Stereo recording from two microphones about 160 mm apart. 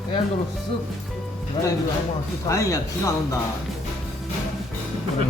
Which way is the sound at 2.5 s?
20° left (ahead or behind).